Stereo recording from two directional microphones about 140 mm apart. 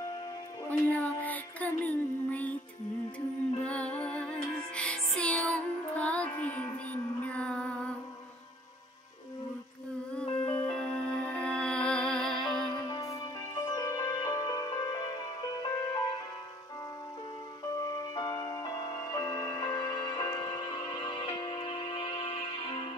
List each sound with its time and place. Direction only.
0.7 s music: 10° left (ahead or behind)
3.6 s music: 10° left (ahead or behind)
10.1 s music: 10° left (ahead or behind)
12.7 s music: 30° left (ahead or behind)
17.7 s music: 25° left (ahead or behind); by 22.8 s 40° left (ahead or behind)